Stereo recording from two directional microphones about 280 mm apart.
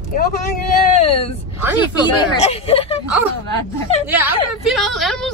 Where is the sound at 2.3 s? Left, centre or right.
Left.